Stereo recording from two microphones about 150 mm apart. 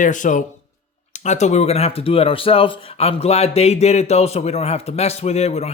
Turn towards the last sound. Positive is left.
turn(degrees=45)  # may be behind; listen again after turning